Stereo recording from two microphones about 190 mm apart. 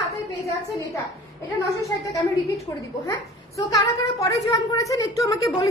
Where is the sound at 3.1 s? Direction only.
15° left (ahead or behind).